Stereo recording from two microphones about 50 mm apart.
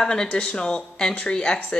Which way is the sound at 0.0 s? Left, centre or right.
Centre.